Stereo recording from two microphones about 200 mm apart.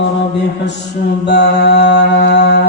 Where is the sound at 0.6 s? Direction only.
60° left (ahead or behind).